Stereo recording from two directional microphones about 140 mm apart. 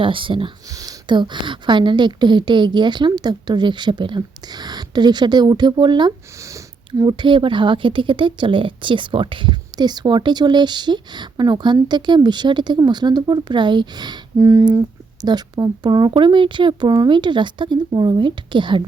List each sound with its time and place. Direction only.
0.0 s a woman's voice: 40° right (ahead or behind)
0.7 s a woman's voice: 25° right (ahead or behind)